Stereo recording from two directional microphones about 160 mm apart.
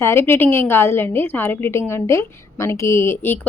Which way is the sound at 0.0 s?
15° left (ahead or behind).